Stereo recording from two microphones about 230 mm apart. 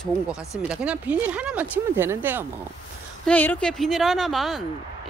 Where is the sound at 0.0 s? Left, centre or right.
Centre.